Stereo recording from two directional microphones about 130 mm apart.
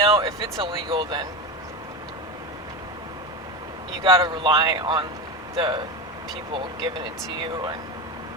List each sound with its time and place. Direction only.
0.0 s a sound: 45° right (ahead or behind)
0.6 s speech: 40° right (ahead or behind)
4.0 s speech: 40° right (ahead or behind)